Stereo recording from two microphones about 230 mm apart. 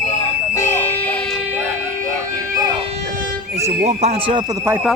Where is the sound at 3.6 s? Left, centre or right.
Right.